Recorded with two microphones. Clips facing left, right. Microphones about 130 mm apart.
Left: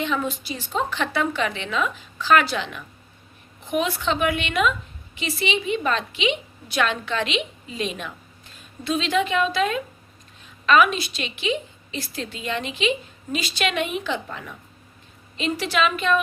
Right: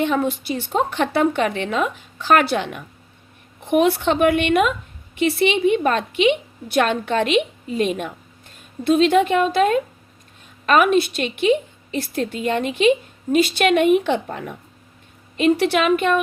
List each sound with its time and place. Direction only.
0.0 s a woman's voice: 50° right (ahead or behind)